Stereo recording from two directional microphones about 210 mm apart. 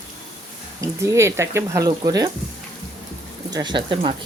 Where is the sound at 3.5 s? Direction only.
20° right (ahead or behind).